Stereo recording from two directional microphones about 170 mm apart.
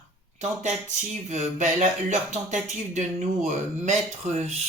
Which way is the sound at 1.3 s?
45° right (ahead or behind).